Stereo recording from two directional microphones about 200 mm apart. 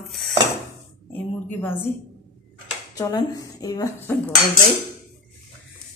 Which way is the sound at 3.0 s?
20° left (ahead or behind).